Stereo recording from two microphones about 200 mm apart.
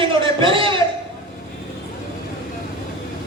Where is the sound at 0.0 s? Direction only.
25° right (ahead or behind).